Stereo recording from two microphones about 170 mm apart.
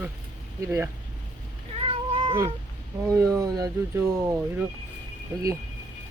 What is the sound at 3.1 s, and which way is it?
Speech, 20° right (ahead or behind).